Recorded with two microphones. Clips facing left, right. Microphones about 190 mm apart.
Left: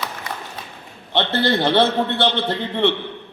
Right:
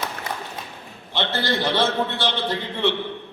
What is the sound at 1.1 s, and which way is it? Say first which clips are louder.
A man's voice: left 5 dB; 60° left (ahead or behind).